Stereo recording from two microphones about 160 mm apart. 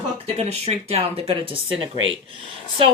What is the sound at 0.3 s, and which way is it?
Speech, 40° right (ahead or behind).